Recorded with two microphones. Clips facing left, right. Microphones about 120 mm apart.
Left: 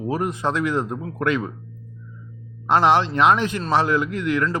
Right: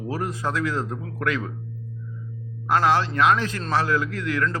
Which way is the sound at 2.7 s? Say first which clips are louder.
Left 3 dB; 20° left (ahead or behind).